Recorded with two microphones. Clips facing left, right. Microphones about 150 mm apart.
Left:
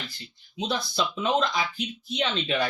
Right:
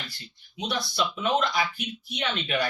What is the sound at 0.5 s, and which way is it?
Speech, 25° left (ahead or behind).